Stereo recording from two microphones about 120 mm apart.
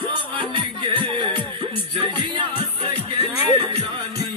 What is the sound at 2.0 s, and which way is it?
Music, 40° right (ahead or behind).